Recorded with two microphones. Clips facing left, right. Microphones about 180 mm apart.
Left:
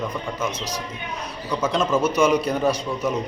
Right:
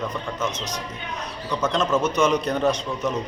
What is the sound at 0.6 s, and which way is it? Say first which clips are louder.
Speech: left 1 dB; 20° right (ahead or behind).